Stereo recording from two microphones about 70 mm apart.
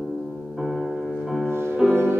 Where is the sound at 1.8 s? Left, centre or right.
Right.